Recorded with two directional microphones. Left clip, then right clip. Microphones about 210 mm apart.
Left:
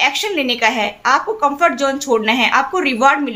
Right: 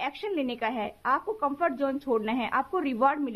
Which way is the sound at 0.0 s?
45° right (ahead or behind).